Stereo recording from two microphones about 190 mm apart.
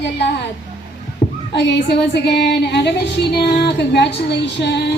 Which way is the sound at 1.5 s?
65° left (ahead or behind).